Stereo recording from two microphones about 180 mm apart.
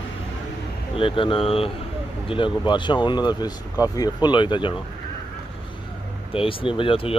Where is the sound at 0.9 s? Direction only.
30° left (ahead or behind).